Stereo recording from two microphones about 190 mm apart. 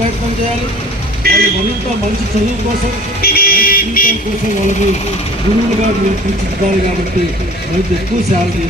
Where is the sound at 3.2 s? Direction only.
50° left (ahead or behind).